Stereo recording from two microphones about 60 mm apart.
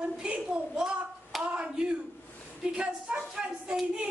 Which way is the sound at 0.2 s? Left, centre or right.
Centre.